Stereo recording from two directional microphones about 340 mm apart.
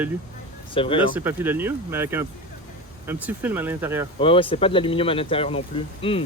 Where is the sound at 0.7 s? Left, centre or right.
Centre.